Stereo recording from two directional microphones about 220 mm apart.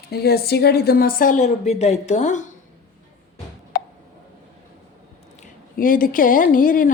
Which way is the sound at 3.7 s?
45° left (ahead or behind).